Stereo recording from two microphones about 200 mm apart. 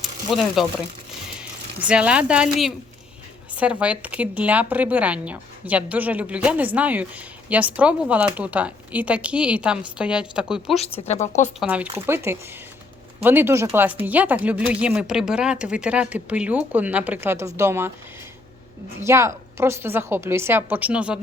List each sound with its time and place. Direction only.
0.3 s speech: centre (ahead or behind)
11.0 s a woman's voice: 35° left (ahead or behind)
11.7 s speech: 10° right (ahead or behind)
18.9 s speech: 15° right (ahead or behind)